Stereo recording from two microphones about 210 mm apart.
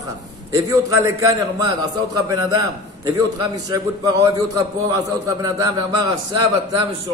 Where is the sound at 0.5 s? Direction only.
15° right (ahead or behind).